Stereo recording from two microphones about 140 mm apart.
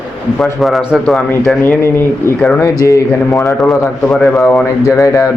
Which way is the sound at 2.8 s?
20° left (ahead or behind).